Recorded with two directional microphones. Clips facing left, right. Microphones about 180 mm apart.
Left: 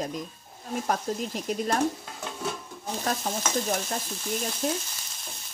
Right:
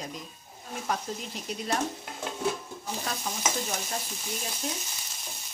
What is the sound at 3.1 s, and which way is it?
Speech, 45° left (ahead or behind).